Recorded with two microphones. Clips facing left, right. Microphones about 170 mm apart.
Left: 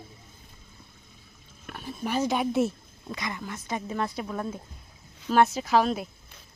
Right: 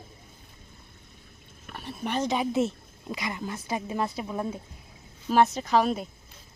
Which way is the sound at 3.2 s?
25° right (ahead or behind).